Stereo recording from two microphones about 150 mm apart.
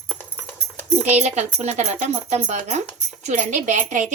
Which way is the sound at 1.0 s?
50° right (ahead or behind).